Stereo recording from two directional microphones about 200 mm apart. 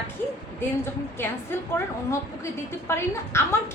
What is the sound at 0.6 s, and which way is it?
A woman's voice, 10° left (ahead or behind).